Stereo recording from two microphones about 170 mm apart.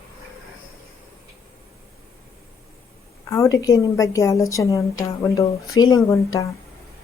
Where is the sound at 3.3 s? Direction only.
20° left (ahead or behind).